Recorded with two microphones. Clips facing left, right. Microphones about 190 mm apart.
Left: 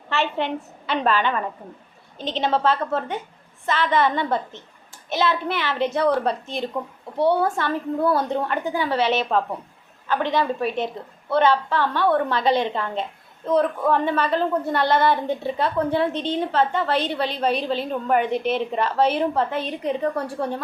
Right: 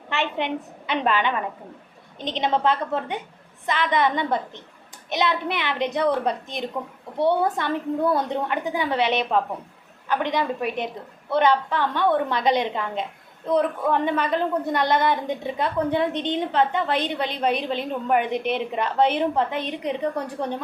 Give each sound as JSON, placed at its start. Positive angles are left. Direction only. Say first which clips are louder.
{"t": 0.1, "sound": "a woman's voice", "louder": "left 2 dB", "side_deg": -15}